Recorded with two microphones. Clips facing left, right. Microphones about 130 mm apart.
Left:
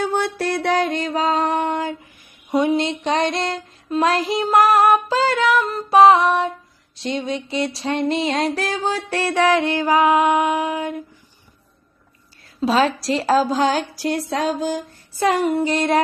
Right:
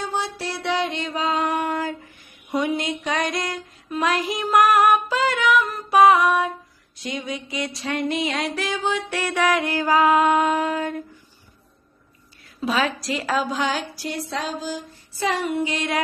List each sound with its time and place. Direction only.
0.0 s mantra: 55° left (ahead or behind); by 2.0 s 25° left (ahead or behind)
2.5 s a sound: 25° left (ahead or behind)
12.5 s mantra: 30° left (ahead or behind)
14.3 s music: 50° left (ahead or behind)